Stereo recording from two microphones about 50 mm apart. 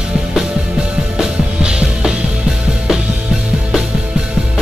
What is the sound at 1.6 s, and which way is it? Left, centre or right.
Music, centre.